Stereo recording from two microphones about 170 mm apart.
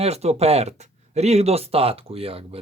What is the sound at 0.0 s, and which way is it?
Speech, 40° right (ahead or behind).